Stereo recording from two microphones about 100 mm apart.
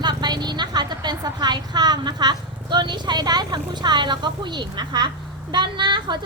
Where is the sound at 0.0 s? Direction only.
45° right (ahead or behind).